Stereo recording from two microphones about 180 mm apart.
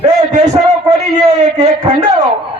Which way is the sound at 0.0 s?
40° right (ahead or behind).